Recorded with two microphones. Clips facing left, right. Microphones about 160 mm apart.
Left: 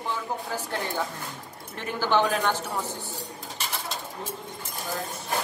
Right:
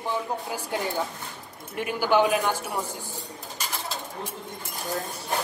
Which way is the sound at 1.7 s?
10° right (ahead or behind).